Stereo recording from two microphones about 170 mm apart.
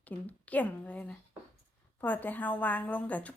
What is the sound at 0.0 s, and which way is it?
A woman's voice, 10° left (ahead or behind).